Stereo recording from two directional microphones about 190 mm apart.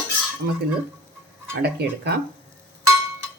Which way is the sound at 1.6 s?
60° right (ahead or behind).